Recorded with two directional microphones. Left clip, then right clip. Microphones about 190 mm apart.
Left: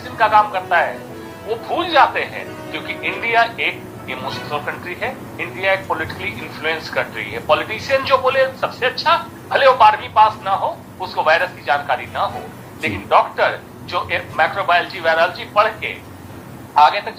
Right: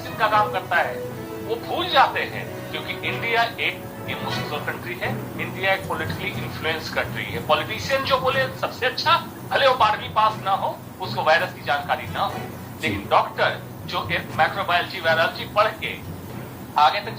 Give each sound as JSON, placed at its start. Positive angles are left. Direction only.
{"t": 0.2, "sound": "a man's voice", "side_deg": 45}